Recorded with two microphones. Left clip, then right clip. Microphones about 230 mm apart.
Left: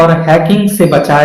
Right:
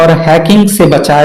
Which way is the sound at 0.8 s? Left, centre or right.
Right.